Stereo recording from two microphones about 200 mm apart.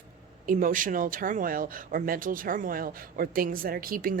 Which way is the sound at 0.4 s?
40° right (ahead or behind).